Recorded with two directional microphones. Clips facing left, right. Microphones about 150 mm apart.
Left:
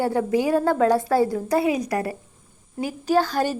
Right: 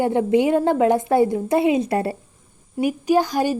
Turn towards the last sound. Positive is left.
turn(degrees=-15)  # may be behind; listen again after turning